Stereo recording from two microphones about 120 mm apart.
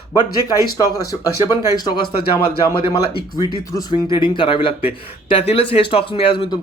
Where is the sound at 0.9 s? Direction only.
30° left (ahead or behind).